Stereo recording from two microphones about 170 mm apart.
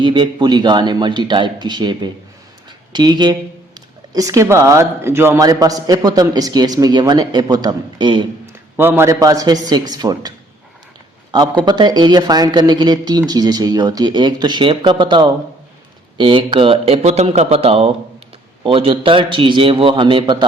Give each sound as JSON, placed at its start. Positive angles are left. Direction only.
{"t": 0.0, "sound": "speech", "side_deg": -30}
{"t": 8.7, "sound": "speech", "side_deg": -10}
{"t": 11.6, "sound": "speech", "side_deg": -25}